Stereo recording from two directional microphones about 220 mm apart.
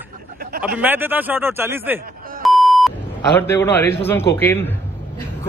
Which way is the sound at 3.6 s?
10° left (ahead or behind).